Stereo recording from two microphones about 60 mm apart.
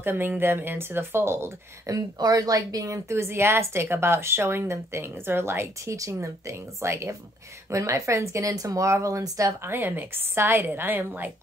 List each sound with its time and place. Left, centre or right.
0.0 s a woman's voice: right
1.9 s speech: right
9.6 s a woman's voice: right